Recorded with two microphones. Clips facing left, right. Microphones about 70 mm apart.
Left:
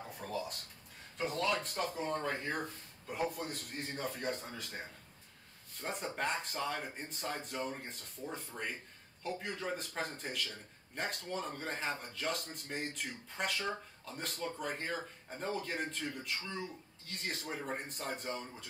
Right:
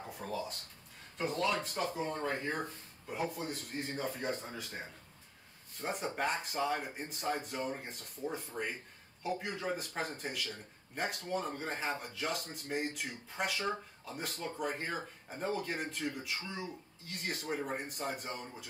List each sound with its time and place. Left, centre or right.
0.2 s speech: centre